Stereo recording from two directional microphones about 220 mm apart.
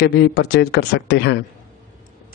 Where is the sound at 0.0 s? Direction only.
45° left (ahead or behind).